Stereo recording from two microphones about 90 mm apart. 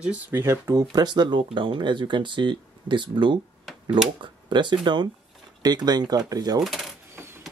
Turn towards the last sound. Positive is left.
turn(degrees=0)  # may be behind; listen again after turning